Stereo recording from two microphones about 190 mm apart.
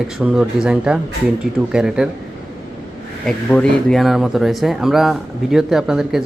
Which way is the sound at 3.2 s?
5° left (ahead or behind).